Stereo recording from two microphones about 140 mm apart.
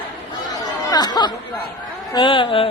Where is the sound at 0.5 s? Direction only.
30° left (ahead or behind).